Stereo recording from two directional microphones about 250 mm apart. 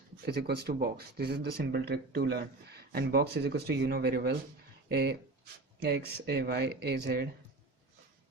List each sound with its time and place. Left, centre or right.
0.3 s speech: right